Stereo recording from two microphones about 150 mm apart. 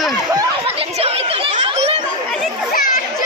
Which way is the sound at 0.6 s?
40° right (ahead or behind).